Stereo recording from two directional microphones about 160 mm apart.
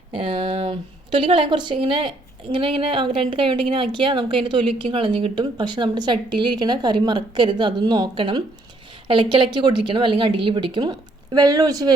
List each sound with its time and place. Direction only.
0.1 s a woman's voice: 35° right (ahead or behind)